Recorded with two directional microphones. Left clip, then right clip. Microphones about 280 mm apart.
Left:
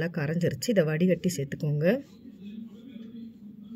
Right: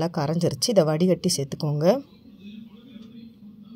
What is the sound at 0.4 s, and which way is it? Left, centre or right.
Speech, right.